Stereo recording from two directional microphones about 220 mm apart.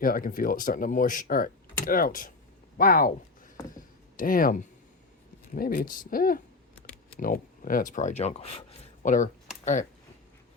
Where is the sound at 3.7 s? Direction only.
40° left (ahead or behind).